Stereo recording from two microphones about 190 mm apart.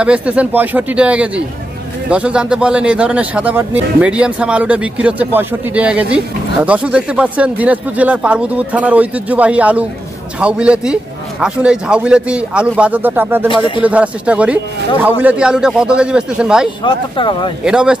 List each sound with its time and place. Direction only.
0.0 s a man's voice: 5° right (ahead or behind)
17.2 s speech: 25° left (ahead or behind)
17.6 s a man's voice: 5° right (ahead or behind)